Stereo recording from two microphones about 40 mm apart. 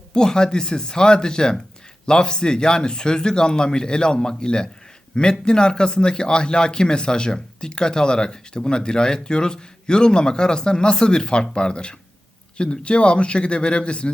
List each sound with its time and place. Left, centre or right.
0.1 s a man's voice: centre